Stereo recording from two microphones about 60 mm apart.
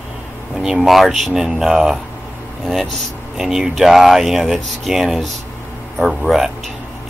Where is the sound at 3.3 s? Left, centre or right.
Centre.